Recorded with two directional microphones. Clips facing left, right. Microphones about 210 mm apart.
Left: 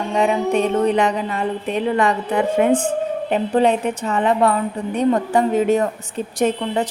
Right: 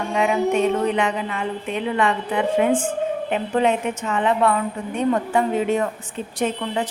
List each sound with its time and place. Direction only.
0.1 s music: 35° left (ahead or behind)